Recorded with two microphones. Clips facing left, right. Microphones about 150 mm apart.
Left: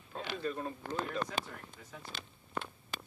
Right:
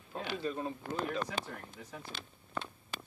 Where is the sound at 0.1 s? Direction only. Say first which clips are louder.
Right 1 dB; 10° right (ahead or behind).